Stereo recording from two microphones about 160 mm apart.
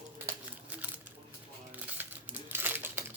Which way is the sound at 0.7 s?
10° right (ahead or behind).